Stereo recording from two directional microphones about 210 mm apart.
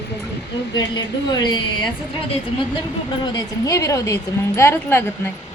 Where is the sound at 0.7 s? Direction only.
20° left (ahead or behind).